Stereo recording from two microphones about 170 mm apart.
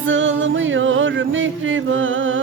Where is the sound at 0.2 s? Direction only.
90° right.